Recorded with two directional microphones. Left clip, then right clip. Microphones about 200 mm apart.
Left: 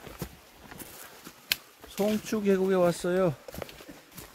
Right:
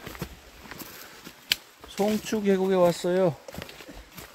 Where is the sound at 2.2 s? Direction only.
5° left (ahead or behind).